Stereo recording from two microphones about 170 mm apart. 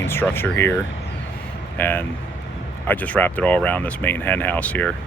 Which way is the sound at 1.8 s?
10° left (ahead or behind).